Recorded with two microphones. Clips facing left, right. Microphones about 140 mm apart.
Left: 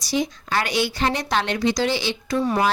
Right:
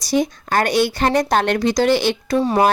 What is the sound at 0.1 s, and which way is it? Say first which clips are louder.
Speech: right 5 dB; 50° right (ahead or behind).